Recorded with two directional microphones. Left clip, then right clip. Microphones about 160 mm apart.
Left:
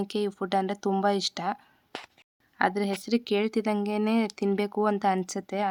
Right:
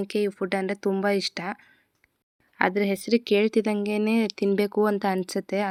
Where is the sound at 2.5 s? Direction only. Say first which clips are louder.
Right 3 dB; 20° right (ahead or behind).